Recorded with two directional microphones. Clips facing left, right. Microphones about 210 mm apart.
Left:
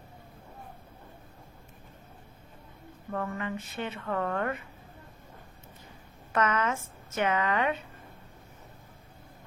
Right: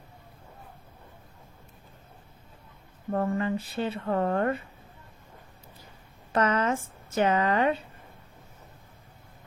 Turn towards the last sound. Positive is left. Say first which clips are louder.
# right 4 dB
turn(degrees=-35)  # may be behind; listen again after turning